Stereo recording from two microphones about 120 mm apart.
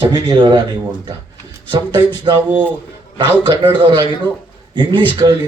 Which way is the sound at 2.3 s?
40° right (ahead or behind).